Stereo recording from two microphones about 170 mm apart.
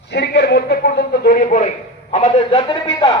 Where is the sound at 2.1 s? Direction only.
35° left (ahead or behind).